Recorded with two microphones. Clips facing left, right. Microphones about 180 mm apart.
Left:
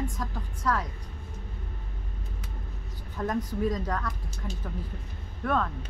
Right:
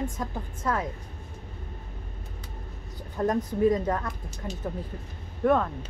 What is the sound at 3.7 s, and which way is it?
Speech, 25° right (ahead or behind).